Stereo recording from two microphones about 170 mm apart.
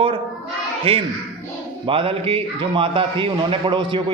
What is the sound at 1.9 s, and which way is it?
A man's voice, 30° right (ahead or behind).